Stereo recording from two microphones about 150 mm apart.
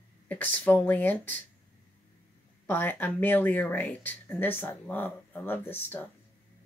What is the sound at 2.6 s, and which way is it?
Speech, 10° left (ahead or behind).